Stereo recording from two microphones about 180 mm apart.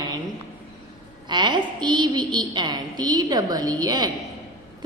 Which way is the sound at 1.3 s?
25° right (ahead or behind).